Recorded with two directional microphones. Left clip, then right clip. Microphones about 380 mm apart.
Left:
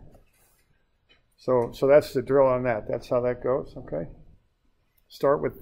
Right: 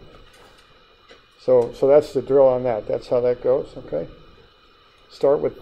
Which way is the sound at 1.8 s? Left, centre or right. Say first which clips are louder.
Right 3 dB; left.